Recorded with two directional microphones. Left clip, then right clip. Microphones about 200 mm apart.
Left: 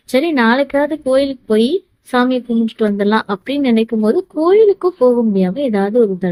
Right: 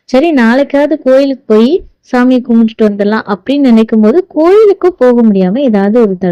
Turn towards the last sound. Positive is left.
turn(degrees=-30)  # may be behind; listen again after turning